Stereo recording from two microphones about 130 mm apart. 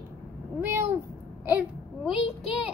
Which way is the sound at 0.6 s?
20° right (ahead or behind).